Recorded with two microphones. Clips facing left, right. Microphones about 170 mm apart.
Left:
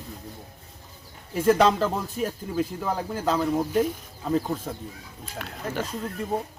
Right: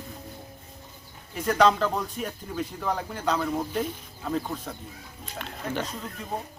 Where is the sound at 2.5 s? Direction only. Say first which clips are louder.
Even; 5° left (ahead or behind).